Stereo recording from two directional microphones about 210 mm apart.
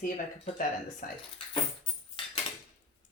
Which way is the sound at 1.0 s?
45° left (ahead or behind).